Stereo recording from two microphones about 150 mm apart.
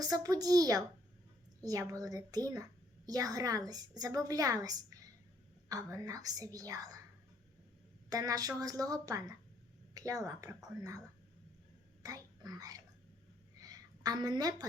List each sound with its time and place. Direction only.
0.0 s a woman's voice: 25° right (ahead or behind)
8.1 s a woman's voice: 25° right (ahead or behind)
12.0 s speech: 25° right (ahead or behind)
13.6 s a sound: 25° right (ahead or behind)